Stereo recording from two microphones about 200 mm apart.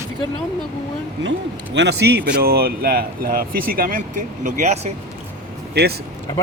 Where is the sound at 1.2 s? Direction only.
65° right (ahead or behind); by 4.9 s 35° right (ahead or behind).